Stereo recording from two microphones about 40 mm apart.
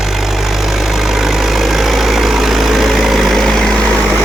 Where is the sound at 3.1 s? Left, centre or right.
Centre.